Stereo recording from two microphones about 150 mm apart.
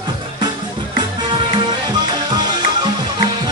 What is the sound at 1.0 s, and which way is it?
Music, 30° right (ahead or behind).